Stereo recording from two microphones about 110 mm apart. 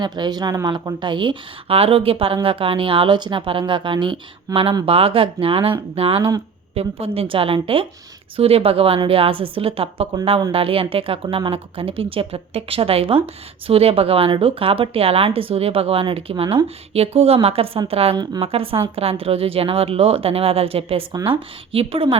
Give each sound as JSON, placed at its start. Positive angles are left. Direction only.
{"t": 0.0, "sound": "a woman's voice", "side_deg": -40}